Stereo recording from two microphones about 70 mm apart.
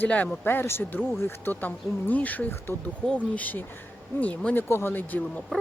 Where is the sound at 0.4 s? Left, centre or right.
Left.